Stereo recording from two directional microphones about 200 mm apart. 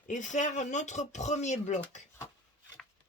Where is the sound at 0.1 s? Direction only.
40° left (ahead or behind).